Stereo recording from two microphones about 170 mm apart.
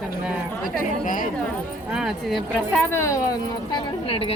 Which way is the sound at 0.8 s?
50° left (ahead or behind).